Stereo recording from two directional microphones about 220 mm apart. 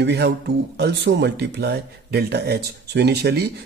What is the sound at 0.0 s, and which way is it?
Speech, 50° right (ahead or behind).